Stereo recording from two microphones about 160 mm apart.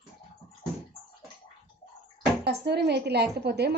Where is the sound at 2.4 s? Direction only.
90° right.